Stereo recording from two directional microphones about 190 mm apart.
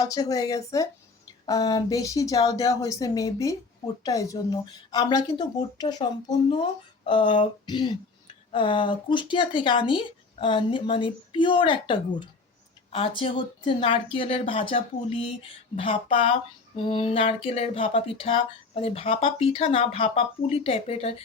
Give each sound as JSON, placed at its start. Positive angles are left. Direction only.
{"t": 0.0, "sound": "speech", "side_deg": 20}